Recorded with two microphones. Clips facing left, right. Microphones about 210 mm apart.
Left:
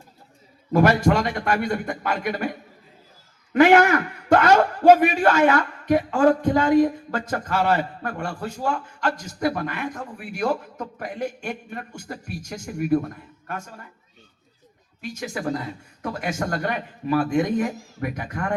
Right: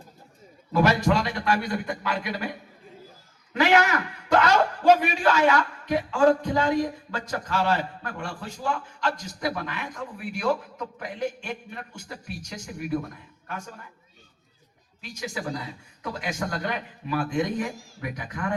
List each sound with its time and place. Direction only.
0.7 s a man's voice: 50° left (ahead or behind)
3.5 s a man's voice: 50° left (ahead or behind)
15.2 s a man's voice: 50° left (ahead or behind)